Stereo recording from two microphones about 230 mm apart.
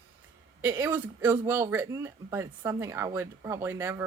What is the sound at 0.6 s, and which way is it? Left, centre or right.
Speech, centre.